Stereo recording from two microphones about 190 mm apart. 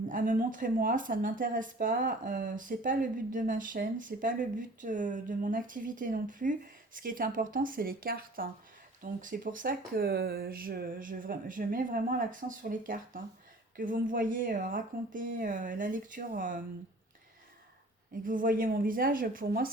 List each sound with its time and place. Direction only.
0.1 s speech: 45° right (ahead or behind)
18.1 s speech: 45° right (ahead or behind)